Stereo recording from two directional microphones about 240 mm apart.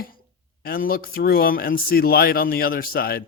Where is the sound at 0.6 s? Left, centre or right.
Left.